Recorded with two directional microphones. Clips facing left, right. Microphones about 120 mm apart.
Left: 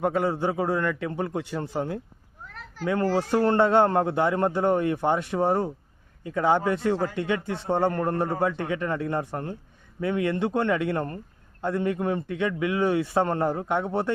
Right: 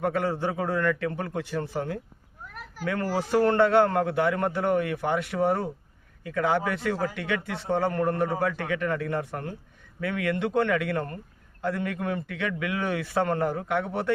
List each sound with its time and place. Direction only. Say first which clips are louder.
0.0 s a man's voice: left 2 dB; 20° left (ahead or behind)
2.4 s a sound: right 1 dB; 10° right (ahead or behind)
2.8 s a man's voice: left 4 dB; 20° left (ahead or behind)